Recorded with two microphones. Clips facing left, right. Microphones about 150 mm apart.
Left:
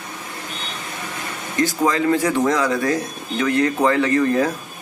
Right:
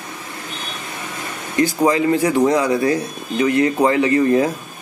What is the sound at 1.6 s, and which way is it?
A man's voice, 15° right (ahead or behind).